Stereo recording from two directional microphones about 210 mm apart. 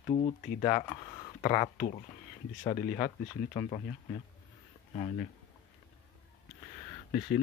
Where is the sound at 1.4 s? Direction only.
40° left (ahead or behind).